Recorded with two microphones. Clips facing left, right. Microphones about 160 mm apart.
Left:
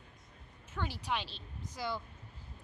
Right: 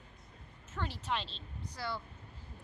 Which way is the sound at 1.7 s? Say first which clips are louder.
Left 2 dB; 15° left (ahead or behind).